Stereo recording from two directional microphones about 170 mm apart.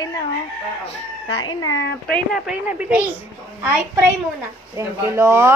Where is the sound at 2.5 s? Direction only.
10° right (ahead or behind).